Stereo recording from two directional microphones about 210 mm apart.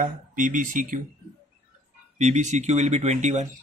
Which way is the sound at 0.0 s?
40° right (ahead or behind).